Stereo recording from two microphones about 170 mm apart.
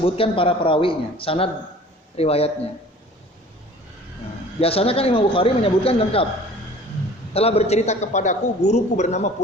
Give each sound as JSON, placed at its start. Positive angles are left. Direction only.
{"t": 0.0, "sound": "speech", "side_deg": 30}
{"t": 4.6, "sound": "speech", "side_deg": 35}
{"t": 7.3, "sound": "a man's voice", "side_deg": 35}